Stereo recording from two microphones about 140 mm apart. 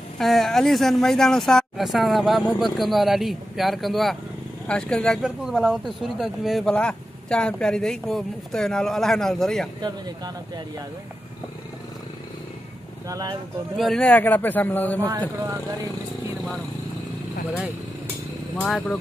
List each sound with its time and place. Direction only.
0.2 s speech: centre (ahead or behind)
9.8 s speech: 30° right (ahead or behind)
13.1 s speech: 25° right (ahead or behind)
13.7 s a man's voice: 5° left (ahead or behind)
18.7 s speech: centre (ahead or behind)